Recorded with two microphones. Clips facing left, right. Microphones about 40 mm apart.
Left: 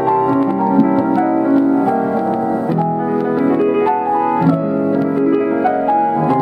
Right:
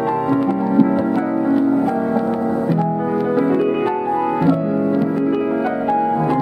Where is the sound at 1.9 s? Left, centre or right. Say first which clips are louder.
Left 3 dB; left.